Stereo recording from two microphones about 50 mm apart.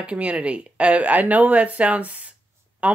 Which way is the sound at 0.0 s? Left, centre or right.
Right.